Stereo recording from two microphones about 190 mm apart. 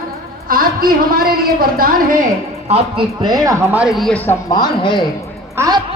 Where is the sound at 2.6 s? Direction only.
30° right (ahead or behind); by 4.4 s 10° left (ahead or behind).